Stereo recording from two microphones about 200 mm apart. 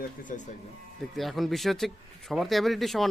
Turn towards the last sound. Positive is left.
turn(degrees=0)  # may be behind; listen again after turning